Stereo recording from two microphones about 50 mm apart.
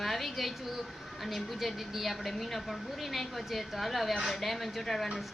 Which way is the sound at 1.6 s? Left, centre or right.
Centre.